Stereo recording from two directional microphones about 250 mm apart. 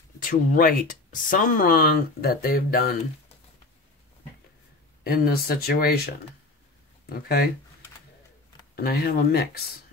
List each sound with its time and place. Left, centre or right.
0.2 s speech: left
5.0 s speech: left
7.1 s speech: left
8.7 s speech: left